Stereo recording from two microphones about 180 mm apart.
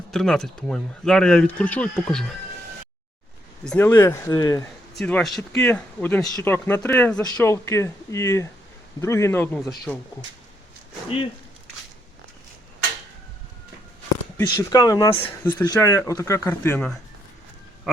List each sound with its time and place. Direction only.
0.1 s speech: centre (ahead or behind)
3.6 s speech: 5° left (ahead or behind)
3.8 s speech: 15° left (ahead or behind)
4.9 s speech: 5° left (ahead or behind)
14.4 s speech: 20° left (ahead or behind)
17.9 s speech: 5° right (ahead or behind)